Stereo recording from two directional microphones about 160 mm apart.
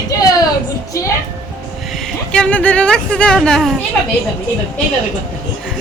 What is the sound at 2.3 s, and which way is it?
Speech, 10° left (ahead or behind).